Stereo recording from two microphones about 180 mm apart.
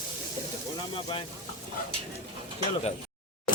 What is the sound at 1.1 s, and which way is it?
Speech, 30° left (ahead or behind).